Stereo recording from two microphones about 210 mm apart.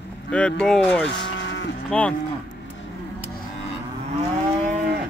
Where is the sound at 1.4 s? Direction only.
60° left (ahead or behind).